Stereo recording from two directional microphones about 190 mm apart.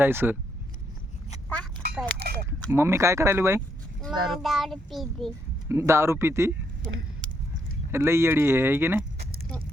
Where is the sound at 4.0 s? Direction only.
Centre (ahead or behind).